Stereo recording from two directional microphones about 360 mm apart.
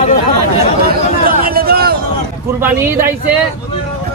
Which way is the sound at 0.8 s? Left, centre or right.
Right.